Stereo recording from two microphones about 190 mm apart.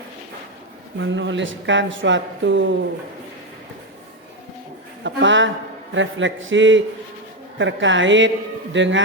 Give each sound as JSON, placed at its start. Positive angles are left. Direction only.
{"t": 0.9, "sound": "speech", "side_deg": -75}
{"t": 5.0, "sound": "a man's voice", "side_deg": -75}